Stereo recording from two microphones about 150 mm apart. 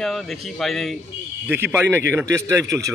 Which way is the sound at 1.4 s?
15° right (ahead or behind).